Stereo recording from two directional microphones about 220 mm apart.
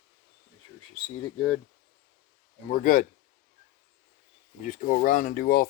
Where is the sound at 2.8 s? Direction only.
40° left (ahead or behind).